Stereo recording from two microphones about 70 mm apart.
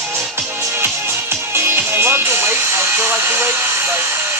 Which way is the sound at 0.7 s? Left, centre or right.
Right.